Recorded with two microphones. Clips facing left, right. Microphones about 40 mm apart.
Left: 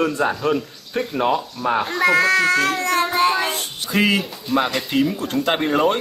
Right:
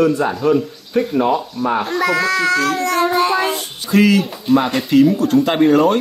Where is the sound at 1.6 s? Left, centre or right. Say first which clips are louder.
Right 2 dB; centre.